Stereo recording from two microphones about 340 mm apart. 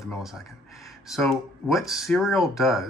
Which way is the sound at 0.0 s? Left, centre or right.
Centre.